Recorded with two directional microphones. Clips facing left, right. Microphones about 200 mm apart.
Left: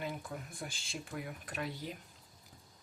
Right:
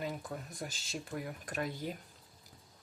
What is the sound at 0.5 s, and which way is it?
Speech, 40° right (ahead or behind).